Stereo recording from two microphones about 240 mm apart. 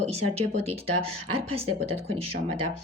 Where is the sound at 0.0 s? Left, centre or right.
Right.